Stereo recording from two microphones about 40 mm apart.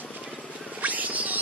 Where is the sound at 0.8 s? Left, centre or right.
Right.